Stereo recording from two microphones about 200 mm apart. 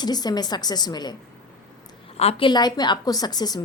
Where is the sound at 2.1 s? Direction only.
30° left (ahead or behind).